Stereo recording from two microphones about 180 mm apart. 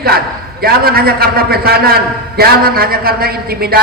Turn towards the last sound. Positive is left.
turn(degrees=-60)  # may be behind; listen again after turning